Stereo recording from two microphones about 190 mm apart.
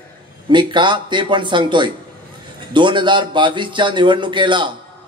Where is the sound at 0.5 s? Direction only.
25° right (ahead or behind).